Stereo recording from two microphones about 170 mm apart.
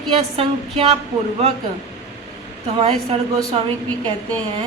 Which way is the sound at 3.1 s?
40° right (ahead or behind).